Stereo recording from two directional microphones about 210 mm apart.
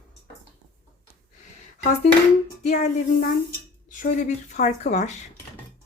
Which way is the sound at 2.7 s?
40° left (ahead or behind).